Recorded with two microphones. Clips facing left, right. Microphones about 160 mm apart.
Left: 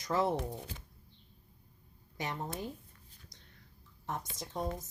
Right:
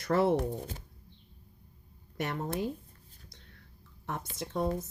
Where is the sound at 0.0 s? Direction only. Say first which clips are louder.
Right 5 dB; 65° right (ahead or behind).